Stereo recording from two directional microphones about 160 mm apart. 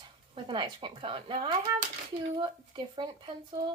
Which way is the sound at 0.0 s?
30° right (ahead or behind).